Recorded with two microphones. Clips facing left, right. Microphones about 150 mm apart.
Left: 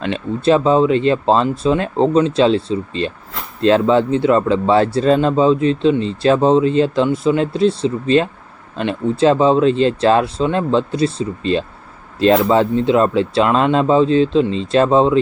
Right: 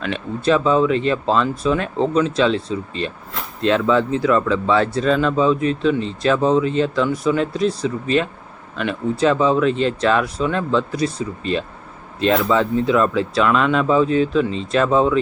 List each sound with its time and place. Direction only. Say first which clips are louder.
0.0 s speech: left 4 dB; 30° left (ahead or behind)